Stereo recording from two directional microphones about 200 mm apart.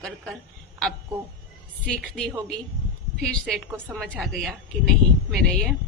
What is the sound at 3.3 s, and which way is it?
A woman's voice, centre (ahead or behind).